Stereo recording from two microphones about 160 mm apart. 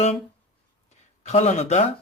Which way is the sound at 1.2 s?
45° left (ahead or behind).